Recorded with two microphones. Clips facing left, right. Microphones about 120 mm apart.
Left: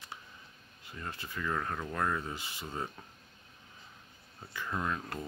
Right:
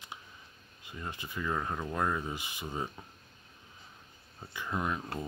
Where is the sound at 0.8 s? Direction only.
20° right (ahead or behind).